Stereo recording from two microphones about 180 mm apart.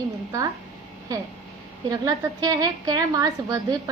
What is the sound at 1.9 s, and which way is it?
A woman's voice, 20° right (ahead or behind).